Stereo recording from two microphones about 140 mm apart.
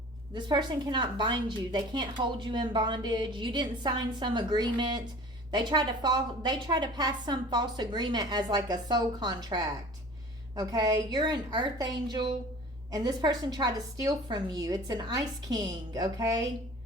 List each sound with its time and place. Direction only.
0.3 s a woman's voice: 35° right (ahead or behind)